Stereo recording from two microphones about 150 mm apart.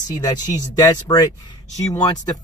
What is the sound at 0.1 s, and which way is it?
Speech, 25° left (ahead or behind).